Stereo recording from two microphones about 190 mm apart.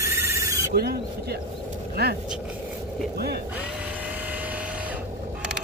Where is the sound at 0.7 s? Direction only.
55° right (ahead or behind).